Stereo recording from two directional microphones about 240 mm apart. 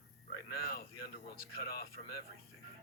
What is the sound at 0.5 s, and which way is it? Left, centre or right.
Speech, left.